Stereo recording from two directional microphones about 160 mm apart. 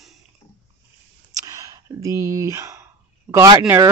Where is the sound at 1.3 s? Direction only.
20° right (ahead or behind).